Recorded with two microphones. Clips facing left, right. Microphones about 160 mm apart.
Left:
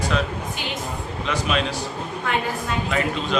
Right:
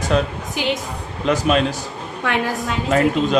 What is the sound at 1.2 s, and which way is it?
Speech, 45° right (ahead or behind).